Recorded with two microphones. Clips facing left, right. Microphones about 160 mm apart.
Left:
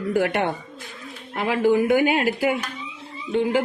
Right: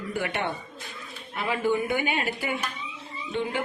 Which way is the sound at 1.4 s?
90° left.